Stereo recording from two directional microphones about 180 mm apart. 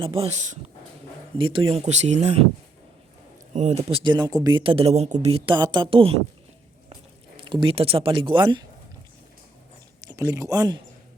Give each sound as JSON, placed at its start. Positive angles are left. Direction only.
{"t": 0.0, "sound": "speech", "side_deg": -30}
{"t": 3.5, "sound": "speech", "side_deg": -40}
{"t": 7.4, "sound": "speech", "side_deg": -25}
{"t": 10.0, "sound": "speech", "side_deg": -20}